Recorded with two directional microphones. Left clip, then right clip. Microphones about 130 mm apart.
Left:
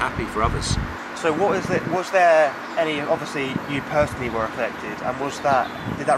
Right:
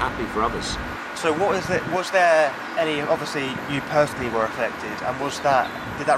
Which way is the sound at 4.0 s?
40° right (ahead or behind).